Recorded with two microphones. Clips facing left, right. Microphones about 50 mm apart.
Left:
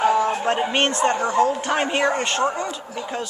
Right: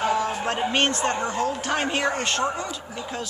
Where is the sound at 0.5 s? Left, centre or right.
Centre.